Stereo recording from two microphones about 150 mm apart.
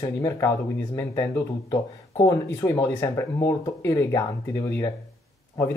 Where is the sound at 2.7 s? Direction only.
15° left (ahead or behind).